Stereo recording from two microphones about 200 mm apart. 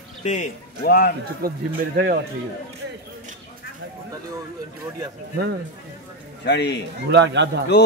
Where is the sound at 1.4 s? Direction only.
45° right (ahead or behind).